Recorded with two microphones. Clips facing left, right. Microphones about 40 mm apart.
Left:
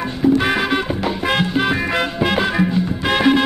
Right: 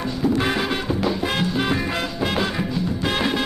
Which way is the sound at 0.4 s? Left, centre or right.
Left.